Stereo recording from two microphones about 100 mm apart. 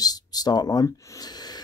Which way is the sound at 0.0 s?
40° left (ahead or behind).